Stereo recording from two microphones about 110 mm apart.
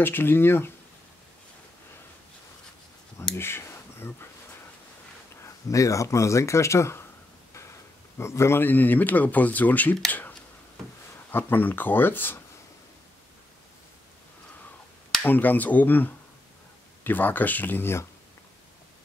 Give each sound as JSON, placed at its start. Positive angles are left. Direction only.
{"t": 0.0, "sound": "speech", "side_deg": 20}
{"t": 3.3, "sound": "speech", "side_deg": 20}
{"t": 5.4, "sound": "speech", "side_deg": 30}
{"t": 8.2, "sound": "speech", "side_deg": 25}
{"t": 11.3, "sound": "speech", "side_deg": 15}
{"t": 15.2, "sound": "speech", "side_deg": 15}